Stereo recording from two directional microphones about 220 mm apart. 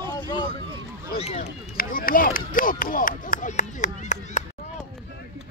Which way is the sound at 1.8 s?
40° left (ahead or behind).